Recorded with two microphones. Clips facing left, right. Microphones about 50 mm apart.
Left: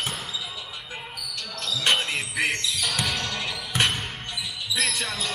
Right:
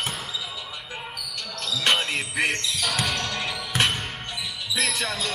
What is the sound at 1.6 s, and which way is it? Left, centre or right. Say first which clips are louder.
Basketball bounce: right 1 dB; centre.